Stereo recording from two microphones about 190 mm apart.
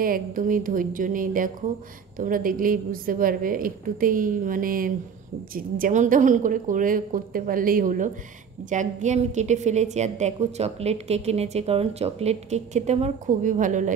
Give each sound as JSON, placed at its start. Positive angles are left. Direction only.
{"t": 0.0, "sound": "a woman's voice", "side_deg": -50}